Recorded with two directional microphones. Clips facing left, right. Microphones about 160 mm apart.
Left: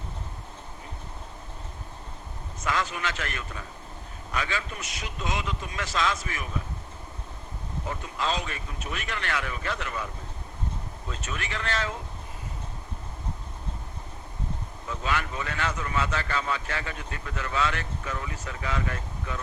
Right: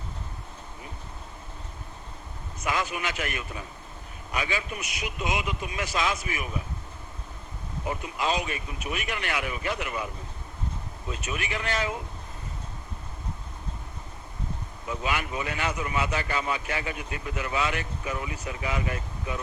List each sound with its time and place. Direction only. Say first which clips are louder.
2.6 s speech: even; 10° right (ahead or behind)
7.9 s speech: right 2 dB; 15° right (ahead or behind)
11.1 s speech: right 3 dB; 15° right (ahead or behind)
14.8 s speech: even; 15° right (ahead or behind)